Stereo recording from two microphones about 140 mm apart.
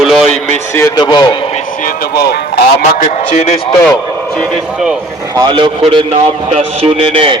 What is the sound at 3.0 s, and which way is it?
Speech, 55° left (ahead or behind).